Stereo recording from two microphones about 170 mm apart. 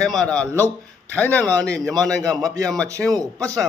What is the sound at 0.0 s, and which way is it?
A man's voice, 5° left (ahead or behind).